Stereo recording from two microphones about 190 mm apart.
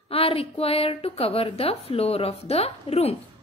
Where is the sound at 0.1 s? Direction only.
30° left (ahead or behind).